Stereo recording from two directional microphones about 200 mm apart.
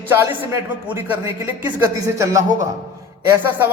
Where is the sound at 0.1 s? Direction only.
10° right (ahead or behind).